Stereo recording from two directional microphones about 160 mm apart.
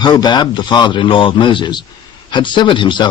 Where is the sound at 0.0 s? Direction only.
25° left (ahead or behind).